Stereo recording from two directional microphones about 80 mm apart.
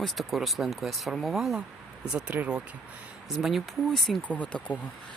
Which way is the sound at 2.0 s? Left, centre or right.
Centre.